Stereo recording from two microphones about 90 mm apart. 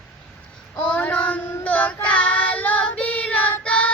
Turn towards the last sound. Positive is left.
turn(degrees=15)  # may be behind; listen again after turning